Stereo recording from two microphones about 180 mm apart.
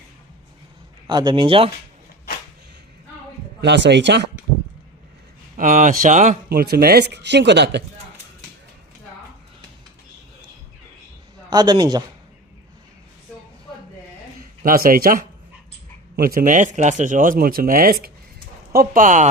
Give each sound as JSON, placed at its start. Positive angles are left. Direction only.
{"t": 1.0, "sound": "speech", "side_deg": -25}
{"t": 3.6, "sound": "speech", "side_deg": -70}
{"t": 5.5, "sound": "a man's voice", "side_deg": -50}
{"t": 6.5, "sound": "speech", "side_deg": -60}
{"t": 11.4, "sound": "speech", "side_deg": -25}
{"t": 14.6, "sound": "a man's voice", "side_deg": -50}